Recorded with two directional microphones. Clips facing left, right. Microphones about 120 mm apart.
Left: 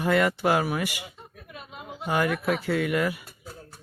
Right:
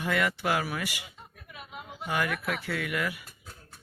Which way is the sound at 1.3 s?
Centre (ahead or behind).